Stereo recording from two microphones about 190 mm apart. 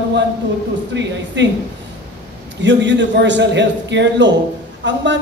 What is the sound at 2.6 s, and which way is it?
A man's voice, 70° right (ahead or behind).